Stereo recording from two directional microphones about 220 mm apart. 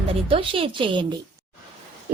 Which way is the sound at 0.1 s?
25° right (ahead or behind).